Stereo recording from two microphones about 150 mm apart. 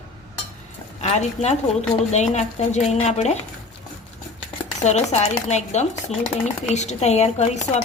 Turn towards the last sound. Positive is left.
turn(degrees=45)  # may be behind; listen again after turning